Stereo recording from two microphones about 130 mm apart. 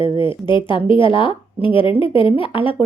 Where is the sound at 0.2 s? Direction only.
40° left (ahead or behind).